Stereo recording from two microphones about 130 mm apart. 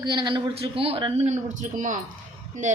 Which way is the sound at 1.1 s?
65° right (ahead or behind).